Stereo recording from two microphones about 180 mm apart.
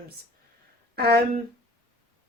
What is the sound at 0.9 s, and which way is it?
Speech, 60° right (ahead or behind).